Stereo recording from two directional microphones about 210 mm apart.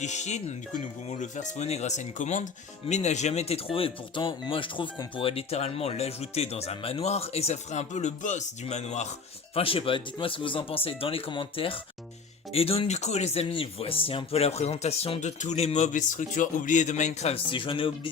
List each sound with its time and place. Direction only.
0.0 s speech: 35° left (ahead or behind)